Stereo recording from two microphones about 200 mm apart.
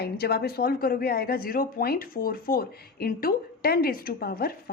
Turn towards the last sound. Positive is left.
turn(degrees=50)  # may be behind; listen again after turning